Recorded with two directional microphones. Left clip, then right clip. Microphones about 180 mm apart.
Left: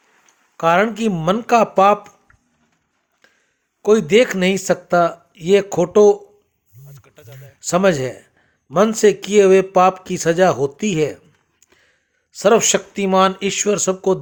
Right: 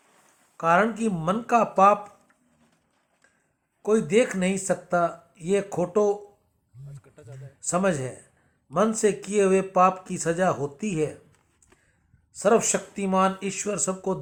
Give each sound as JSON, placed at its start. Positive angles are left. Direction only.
{"t": 0.5, "sound": "speech", "side_deg": 45}
{"t": 3.8, "sound": "speech", "side_deg": 45}
{"t": 6.9, "sound": "a sound", "side_deg": 0}
{"t": 7.6, "sound": "speech", "side_deg": 45}
{"t": 12.3, "sound": "speech", "side_deg": 45}